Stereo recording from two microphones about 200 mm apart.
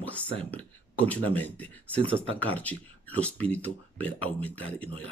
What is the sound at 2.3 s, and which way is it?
Speech, 10° left (ahead or behind).